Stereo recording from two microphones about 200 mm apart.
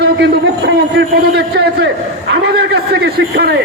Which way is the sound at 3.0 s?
55° right (ahead or behind).